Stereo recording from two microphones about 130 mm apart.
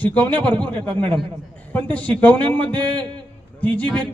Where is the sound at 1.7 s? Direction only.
10° left (ahead or behind).